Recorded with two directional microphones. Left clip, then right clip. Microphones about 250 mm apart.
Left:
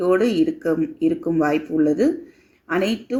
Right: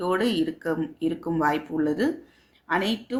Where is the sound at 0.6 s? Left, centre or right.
Centre.